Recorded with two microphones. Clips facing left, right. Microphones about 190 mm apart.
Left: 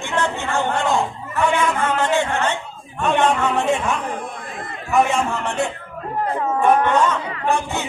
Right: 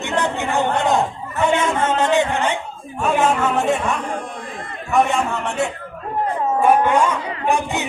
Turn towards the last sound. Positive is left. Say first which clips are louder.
# right 1 dB
turn(degrees=-15)  # may be behind; listen again after turning